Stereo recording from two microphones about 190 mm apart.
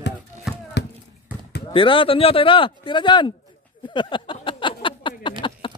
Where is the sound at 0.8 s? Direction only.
60° left (ahead or behind).